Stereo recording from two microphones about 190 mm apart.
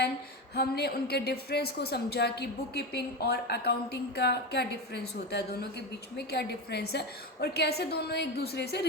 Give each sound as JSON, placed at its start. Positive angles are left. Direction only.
{"t": 0.5, "sound": "a woman's voice", "side_deg": 55}
{"t": 6.1, "sound": "a woman's voice", "side_deg": 60}